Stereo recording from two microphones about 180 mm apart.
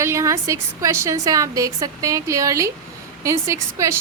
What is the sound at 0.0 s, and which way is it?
A woman's voice, 15° right (ahead or behind).